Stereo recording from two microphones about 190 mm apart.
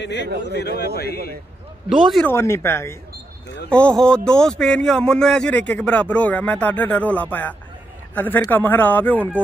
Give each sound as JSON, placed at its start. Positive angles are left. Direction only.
{"t": 0.0, "sound": "speech", "side_deg": 65}
{"t": 1.9, "sound": "speech", "side_deg": 0}
{"t": 2.3, "sound": "a man's voice", "side_deg": 15}